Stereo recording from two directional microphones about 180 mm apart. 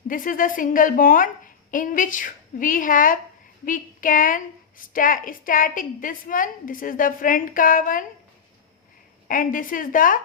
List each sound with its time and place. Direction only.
0.1 s a woman's voice: 50° left (ahead or behind)
9.2 s a woman's voice: 50° left (ahead or behind)